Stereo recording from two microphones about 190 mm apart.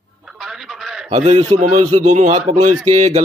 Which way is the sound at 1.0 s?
35° right (ahead or behind).